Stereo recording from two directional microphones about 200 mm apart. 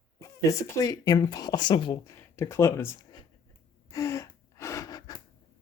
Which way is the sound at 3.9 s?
15° left (ahead or behind).